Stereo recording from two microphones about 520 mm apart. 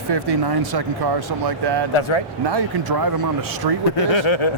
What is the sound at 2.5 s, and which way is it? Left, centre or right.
Speech, right.